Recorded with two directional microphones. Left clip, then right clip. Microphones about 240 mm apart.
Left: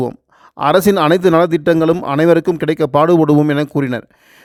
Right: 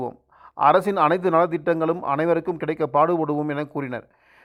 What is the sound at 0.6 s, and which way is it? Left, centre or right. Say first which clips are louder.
Speech: left 5 dB; left.